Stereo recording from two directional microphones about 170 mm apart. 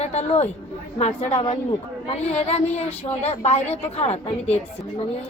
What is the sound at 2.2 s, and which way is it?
A woman's voice, 40° left (ahead or behind).